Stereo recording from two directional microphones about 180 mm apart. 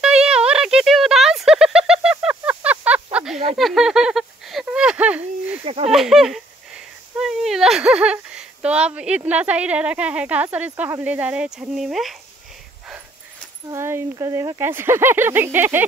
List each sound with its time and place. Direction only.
0.0 s a sound: 5° right (ahead or behind)
5.6 s speech: 30° right (ahead or behind)
5.9 s speech: centre (ahead or behind)
13.7 s speech: 15° right (ahead or behind)